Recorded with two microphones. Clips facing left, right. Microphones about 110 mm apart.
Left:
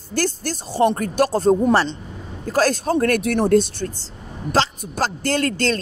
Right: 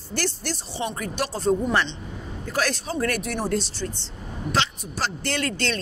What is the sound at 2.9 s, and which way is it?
A woman's voice, 55° left (ahead or behind).